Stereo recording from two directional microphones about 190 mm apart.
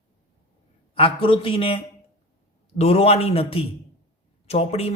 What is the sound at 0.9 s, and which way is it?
Speech, 25° left (ahead or behind).